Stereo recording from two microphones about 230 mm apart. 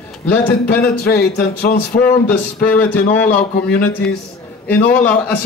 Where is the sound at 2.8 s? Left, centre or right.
Centre.